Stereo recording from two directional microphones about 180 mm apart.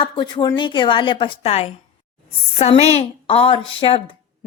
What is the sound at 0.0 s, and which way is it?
A woman's voice, 25° left (ahead or behind).